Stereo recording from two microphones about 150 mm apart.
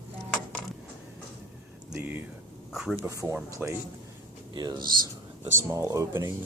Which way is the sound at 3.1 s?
20° right (ahead or behind).